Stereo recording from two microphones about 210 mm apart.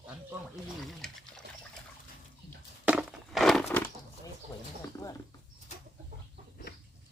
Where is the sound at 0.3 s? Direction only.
Centre (ahead or behind).